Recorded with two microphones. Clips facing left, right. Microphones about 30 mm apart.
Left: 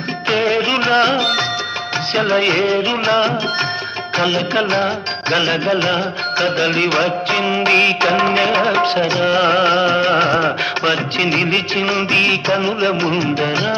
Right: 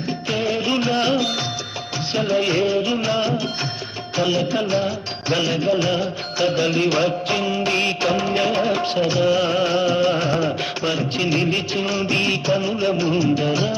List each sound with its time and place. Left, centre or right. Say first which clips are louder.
0.3 s music: left 6 dB; left
2.7 s music of bollywood: left 5 dB; left
4.2 s music: left 3 dB; left
5.3 s music of bollywood: left 3 dB; left